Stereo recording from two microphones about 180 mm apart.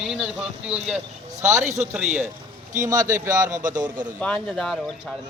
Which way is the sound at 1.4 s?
15° right (ahead or behind).